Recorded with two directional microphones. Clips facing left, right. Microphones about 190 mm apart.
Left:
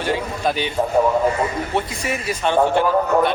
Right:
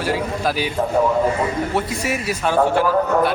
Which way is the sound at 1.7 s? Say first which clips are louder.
Right 1 dB; 5° right (ahead or behind).